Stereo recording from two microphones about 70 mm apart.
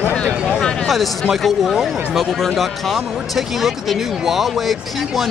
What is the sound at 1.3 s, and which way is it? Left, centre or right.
Speech, centre.